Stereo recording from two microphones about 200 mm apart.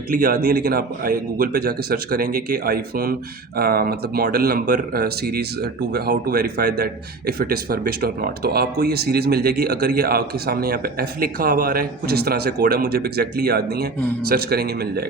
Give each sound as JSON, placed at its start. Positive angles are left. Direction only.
{"t": 0.1, "sound": "a man's voice", "side_deg": -45}